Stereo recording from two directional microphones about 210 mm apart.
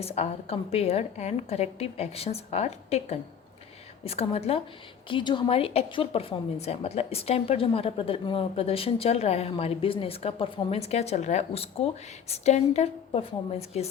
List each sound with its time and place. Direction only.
0.0 s a woman's voice: 30° left (ahead or behind)